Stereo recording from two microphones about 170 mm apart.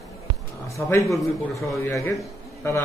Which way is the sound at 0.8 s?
15° left (ahead or behind).